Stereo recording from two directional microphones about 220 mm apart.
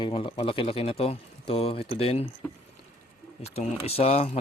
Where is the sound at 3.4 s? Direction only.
25° left (ahead or behind).